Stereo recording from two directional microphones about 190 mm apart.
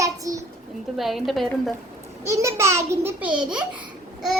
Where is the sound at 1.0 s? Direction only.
Centre (ahead or behind).